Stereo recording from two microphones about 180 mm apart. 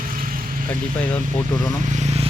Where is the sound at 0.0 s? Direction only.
50° right (ahead or behind).